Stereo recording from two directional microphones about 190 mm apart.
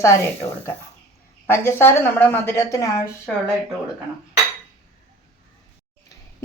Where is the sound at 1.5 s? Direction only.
10° left (ahead or behind).